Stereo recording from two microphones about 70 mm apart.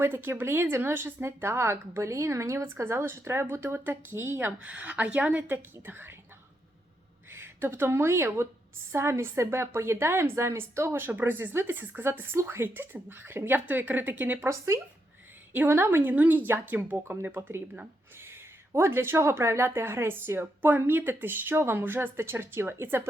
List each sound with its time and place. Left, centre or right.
0.0 s speech: right
4.6 s speech: right
7.3 s speech: right
14.5 s speech: right
15.5 s a woman's voice: right